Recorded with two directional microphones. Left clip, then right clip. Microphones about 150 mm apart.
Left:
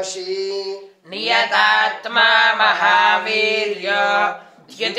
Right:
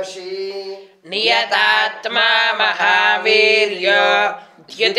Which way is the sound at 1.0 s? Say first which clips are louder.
Right 2 dB; 40° right (ahead or behind).